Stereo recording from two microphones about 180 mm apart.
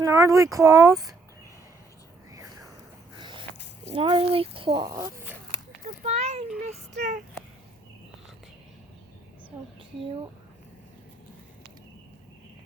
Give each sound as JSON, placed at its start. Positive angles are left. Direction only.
{"t": 0.0, "sound": "speech", "side_deg": -15}
{"t": 3.2, "sound": "a sound", "side_deg": -25}
{"t": 3.9, "sound": "speech", "side_deg": -30}
{"t": 6.0, "sound": "a sound", "side_deg": -35}
{"t": 6.6, "sound": "child singing", "side_deg": -40}
{"t": 9.5, "sound": "speech", "side_deg": -40}